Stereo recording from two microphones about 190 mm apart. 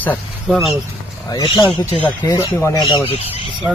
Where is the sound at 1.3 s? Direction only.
25° left (ahead or behind).